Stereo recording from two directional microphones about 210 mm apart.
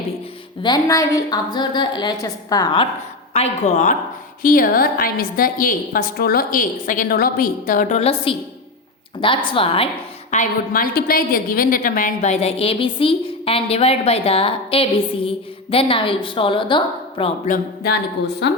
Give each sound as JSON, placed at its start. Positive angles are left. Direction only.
{"t": 0.6, "sound": "a woman's voice", "side_deg": 20}
{"t": 3.3, "sound": "a woman's voice", "side_deg": 30}
{"t": 10.3, "sound": "a woman's voice", "side_deg": 40}